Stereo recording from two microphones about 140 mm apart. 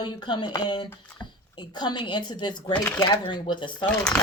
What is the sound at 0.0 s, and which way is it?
Speech, 35° left (ahead or behind).